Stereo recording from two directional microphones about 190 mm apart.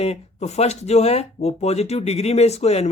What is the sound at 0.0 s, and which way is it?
Speech, 35° left (ahead or behind).